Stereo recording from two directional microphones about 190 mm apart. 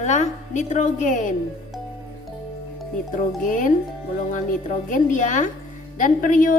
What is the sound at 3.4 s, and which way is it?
A woman's voice, 45° left (ahead or behind).